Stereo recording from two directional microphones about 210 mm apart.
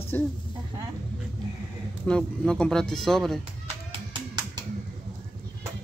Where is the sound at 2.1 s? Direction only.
5° left (ahead or behind).